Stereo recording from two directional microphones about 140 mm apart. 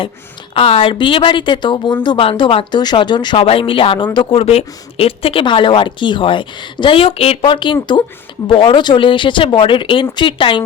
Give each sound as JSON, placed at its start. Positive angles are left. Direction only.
{"t": 0.5, "sound": "speech", "side_deg": 45}